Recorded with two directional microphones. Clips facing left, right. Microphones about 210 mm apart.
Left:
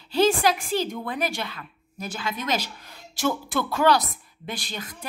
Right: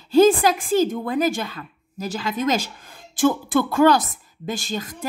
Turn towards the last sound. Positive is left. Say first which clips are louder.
# right 7 dB
turn(degrees=-45)  # may be behind; listen again after turning